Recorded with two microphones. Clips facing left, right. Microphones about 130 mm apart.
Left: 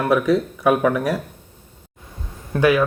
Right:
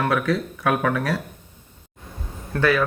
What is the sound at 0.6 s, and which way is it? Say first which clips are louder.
Speech: left 4 dB; 20° left (ahead or behind).